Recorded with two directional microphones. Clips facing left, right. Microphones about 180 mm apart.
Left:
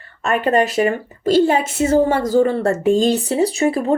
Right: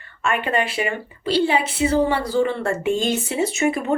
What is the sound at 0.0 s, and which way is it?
A woman's voice, 40° left (ahead or behind).